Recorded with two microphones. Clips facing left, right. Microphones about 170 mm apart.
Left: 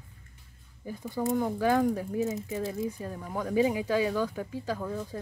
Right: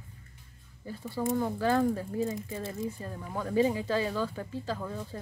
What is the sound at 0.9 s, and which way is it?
Speech, 15° left (ahead or behind).